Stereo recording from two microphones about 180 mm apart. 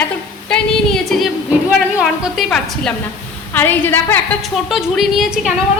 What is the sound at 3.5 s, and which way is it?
Speech, 10° left (ahead or behind).